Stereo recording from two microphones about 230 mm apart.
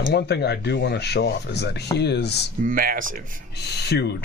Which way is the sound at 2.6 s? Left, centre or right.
Right.